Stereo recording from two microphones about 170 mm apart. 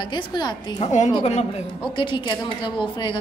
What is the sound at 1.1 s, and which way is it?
A woman's voice, 30° left (ahead or behind).